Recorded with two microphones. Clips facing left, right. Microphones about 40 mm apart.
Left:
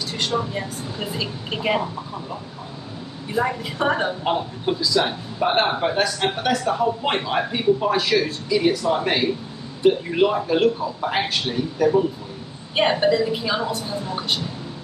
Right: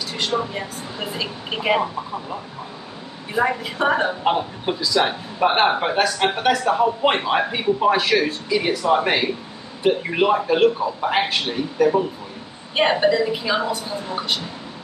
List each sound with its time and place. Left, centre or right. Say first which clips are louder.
0.2 s speech: right 1 dB; centre
3.3 s a man's voice: right 2 dB; right
3.7 s speech: right 1 dB; centre
4.2 s a man's voice: right 2 dB; right
5.9 s a man's voice: right 2 dB; centre